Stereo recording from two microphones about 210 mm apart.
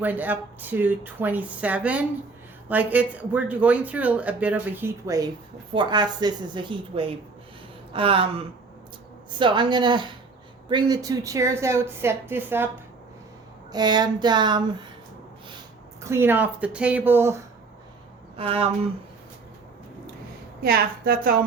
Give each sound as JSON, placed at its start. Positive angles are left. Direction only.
{"t": 0.0, "sound": "a woman's voice", "side_deg": -10}
{"t": 13.7, "sound": "a woman's voice", "side_deg": -20}
{"t": 16.0, "sound": "speech", "side_deg": -10}
{"t": 18.3, "sound": "a woman's voice", "side_deg": -25}
{"t": 20.6, "sound": "a woman's voice", "side_deg": -45}